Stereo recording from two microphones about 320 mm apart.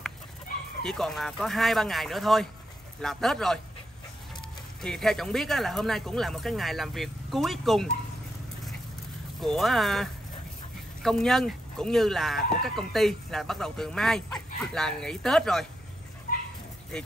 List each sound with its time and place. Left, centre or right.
0.8 s speech: centre
4.8 s speech: centre
9.4 s speech: centre
16.3 s cat: left